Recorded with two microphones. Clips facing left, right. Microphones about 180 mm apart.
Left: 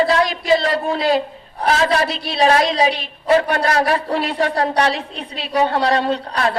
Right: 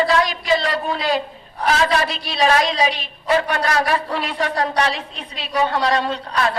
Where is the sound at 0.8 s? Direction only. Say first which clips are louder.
Left 4 dB; 45° left (ahead or behind).